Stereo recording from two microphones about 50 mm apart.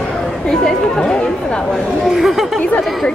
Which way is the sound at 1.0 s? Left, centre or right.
Centre.